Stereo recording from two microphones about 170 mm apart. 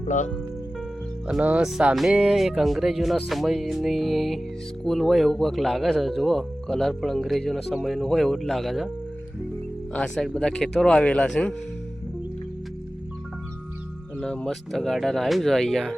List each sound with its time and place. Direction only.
0.0 s speech: 45° left (ahead or behind)
1.3 s speech: 10° right (ahead or behind)
9.9 s speech: 5° left (ahead or behind)
14.2 s speech: 5° left (ahead or behind)